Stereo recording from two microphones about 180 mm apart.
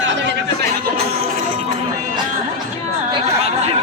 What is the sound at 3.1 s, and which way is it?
Chatter, 35° right (ahead or behind).